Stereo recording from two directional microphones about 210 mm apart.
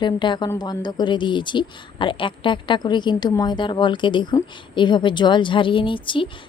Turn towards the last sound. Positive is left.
turn(degrees=25)  # may be behind; listen again after turning